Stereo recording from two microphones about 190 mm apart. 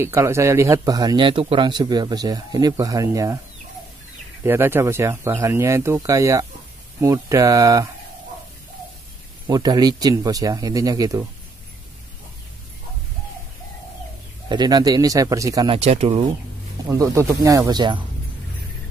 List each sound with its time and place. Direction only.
0.0 s a man's voice: 15° right (ahead or behind)
4.5 s speech: 10° right (ahead or behind)
9.5 s a man's voice: 20° right (ahead or behind)
14.5 s a man's voice: 20° right (ahead or behind)
15.8 s speech: 30° right (ahead or behind)
17.0 s speech: 15° right (ahead or behind)